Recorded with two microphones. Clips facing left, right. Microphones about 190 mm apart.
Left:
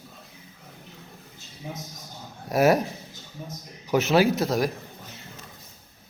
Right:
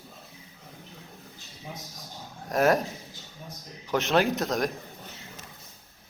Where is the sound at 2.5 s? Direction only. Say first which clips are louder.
Left 3 dB; 10° left (ahead or behind).